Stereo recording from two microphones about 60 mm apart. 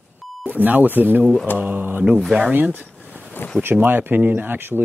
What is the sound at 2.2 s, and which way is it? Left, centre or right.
Speech, centre.